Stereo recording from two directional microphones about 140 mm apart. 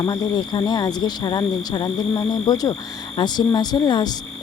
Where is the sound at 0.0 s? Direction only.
30° left (ahead or behind).